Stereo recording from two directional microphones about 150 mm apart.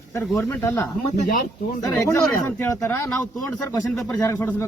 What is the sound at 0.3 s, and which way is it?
Speech, 20° left (ahead or behind).